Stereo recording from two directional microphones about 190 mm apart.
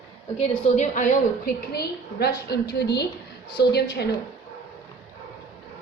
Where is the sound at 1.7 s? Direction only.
55° left (ahead or behind).